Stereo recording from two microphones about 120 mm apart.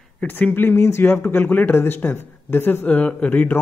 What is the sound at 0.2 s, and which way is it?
Speech, 10° left (ahead or behind).